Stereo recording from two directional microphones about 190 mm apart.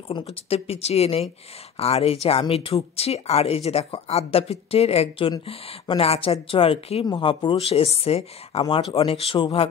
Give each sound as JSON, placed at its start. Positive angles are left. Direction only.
{"t": 0.1, "sound": "speech", "side_deg": 30}